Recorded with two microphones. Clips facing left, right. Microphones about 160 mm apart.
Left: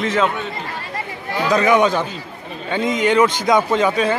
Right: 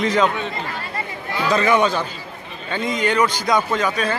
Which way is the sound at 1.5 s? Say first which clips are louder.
Left 2 dB; 15° left (ahead or behind).